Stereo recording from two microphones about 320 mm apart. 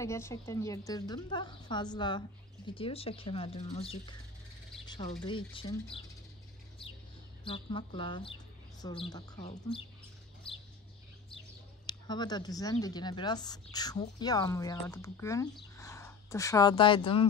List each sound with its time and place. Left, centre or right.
0.0 s a woman's voice: centre
4.8 s a sound: centre
5.2 s a woman's voice: centre
7.4 s a woman's voice: centre
11.3 s speech: centre